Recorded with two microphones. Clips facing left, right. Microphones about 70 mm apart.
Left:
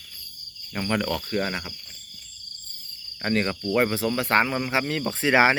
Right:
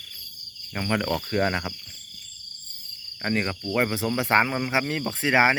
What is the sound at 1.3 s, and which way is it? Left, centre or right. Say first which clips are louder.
Speech: right 3 dB; right.